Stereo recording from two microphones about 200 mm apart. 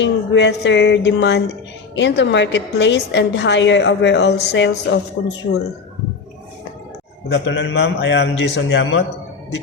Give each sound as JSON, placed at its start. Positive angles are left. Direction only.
{"t": 0.0, "sound": "a woman's voice", "side_deg": 60}
{"t": 5.2, "sound": "speech", "side_deg": 80}
{"t": 7.3, "sound": "a woman's voice", "side_deg": 60}